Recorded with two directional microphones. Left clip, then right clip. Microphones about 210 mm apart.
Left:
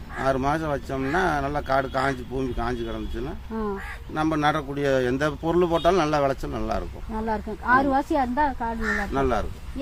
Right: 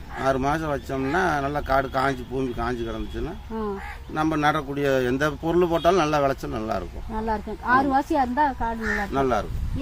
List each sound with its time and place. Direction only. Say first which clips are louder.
0.2 s speech: even; centre (ahead or behind)
7.1 s speech: right 1 dB; 20° left (ahead or behind)
9.1 s speech: right 3 dB; centre (ahead or behind)